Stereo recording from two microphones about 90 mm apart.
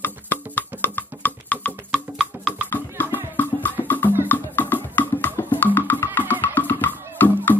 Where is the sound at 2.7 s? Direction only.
20° left (ahead or behind).